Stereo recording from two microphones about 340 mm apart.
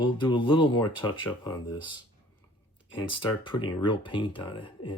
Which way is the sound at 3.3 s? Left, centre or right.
Centre.